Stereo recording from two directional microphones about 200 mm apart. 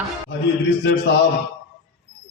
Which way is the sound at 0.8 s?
60° left (ahead or behind).